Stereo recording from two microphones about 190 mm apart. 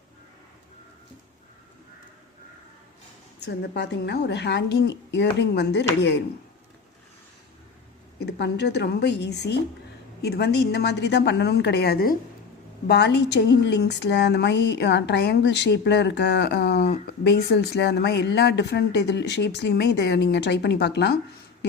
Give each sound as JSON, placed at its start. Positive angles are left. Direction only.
{"t": 3.4, "sound": "speech", "side_deg": 60}
{"t": 8.2, "sound": "speech", "side_deg": 65}